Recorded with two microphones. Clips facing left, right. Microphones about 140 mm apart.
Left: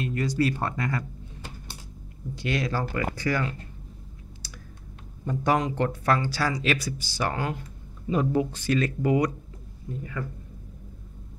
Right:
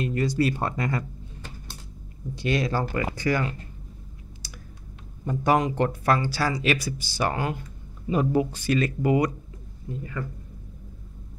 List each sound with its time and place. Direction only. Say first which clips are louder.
0.0 s speech: right 2 dB; 25° right (ahead or behind)
2.4 s speech: right 3 dB; 25° right (ahead or behind)
5.2 s speech: right 2 dB; 10° right (ahead or behind)